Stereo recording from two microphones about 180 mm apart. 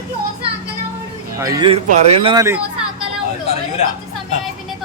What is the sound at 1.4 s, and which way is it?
Speech, 20° right (ahead or behind).